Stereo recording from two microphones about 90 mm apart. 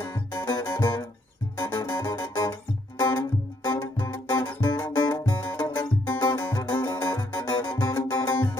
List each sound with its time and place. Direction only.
0.1 s music: 55° left (ahead or behind)